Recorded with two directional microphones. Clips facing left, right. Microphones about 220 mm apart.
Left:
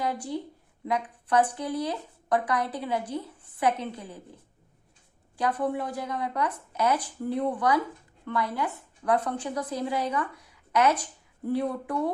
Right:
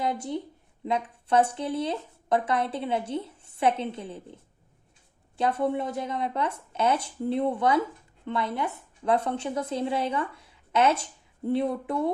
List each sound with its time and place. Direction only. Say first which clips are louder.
0.0 s speech: right 1 dB; 25° right (ahead or behind)
5.4 s a woman's voice: right 2 dB; 25° right (ahead or behind)